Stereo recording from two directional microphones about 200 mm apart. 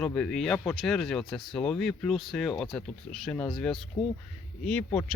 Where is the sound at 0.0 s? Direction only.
5° left (ahead or behind).